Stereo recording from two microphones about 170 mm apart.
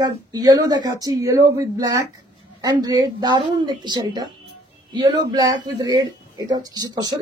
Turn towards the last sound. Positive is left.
turn(degrees=-25)  # may be behind; listen again after turning